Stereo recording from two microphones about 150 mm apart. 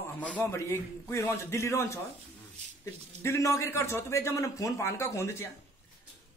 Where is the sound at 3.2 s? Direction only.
20° left (ahead or behind).